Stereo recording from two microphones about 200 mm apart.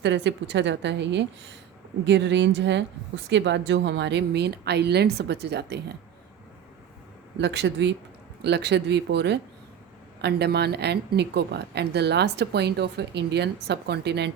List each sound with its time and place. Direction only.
0.0 s speech: 65° right (ahead or behind)
7.3 s speech: 60° right (ahead or behind)